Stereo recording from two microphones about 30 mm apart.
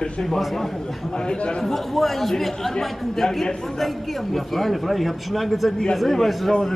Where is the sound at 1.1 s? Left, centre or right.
Left.